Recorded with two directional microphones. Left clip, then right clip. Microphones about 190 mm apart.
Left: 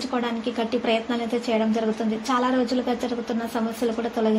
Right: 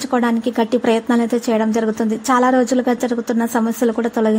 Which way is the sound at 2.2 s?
50° right (ahead or behind).